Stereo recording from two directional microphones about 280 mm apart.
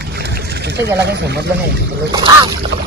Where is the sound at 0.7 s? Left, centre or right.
Right.